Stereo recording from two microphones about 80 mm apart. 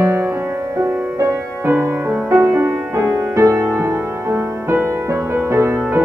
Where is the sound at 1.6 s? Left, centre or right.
Right.